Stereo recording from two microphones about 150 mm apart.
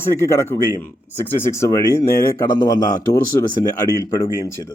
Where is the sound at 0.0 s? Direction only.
15° left (ahead or behind).